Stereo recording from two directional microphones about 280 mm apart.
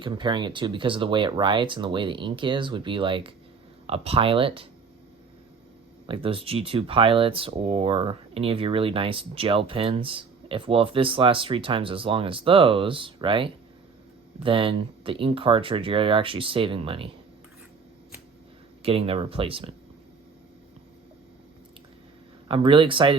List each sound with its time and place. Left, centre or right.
0.0 s speech: centre
6.1 s speech: centre
18.8 s speech: centre
22.4 s speech: centre